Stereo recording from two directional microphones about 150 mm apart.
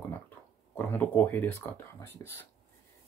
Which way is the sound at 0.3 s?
10° left (ahead or behind).